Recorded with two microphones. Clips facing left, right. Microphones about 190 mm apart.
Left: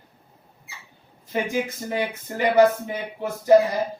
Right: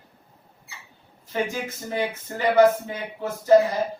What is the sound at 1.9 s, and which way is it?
Speech, 15° left (ahead or behind).